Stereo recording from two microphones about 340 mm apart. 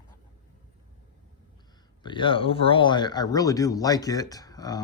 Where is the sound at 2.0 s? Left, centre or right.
Centre.